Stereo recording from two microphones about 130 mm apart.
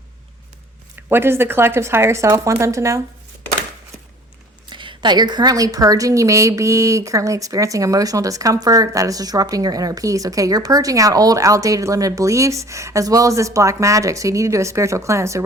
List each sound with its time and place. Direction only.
0.9 s a woman's voice: 15° right (ahead or behind)
4.7 s a woman's voice: 35° right (ahead or behind)